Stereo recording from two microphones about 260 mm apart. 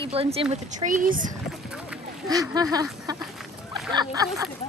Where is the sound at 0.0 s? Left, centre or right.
Right.